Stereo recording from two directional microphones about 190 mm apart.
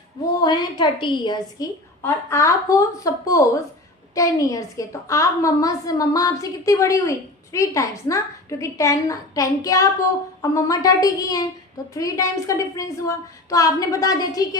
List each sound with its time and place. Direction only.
0.4 s a woman's voice: 25° left (ahead or behind)
2.0 s a woman's voice: 15° left (ahead or behind)